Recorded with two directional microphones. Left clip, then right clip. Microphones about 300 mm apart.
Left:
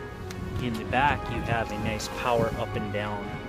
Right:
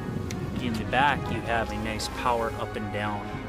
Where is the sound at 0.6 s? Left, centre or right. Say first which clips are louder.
Right 1 dB; centre.